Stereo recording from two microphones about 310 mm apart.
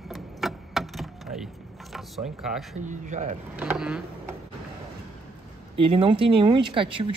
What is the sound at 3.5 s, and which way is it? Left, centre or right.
Speech, centre.